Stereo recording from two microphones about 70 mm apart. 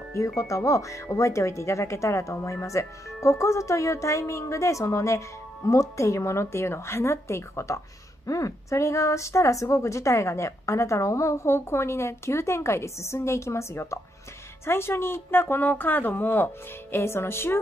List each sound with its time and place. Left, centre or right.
0.4 s a woman's voice: left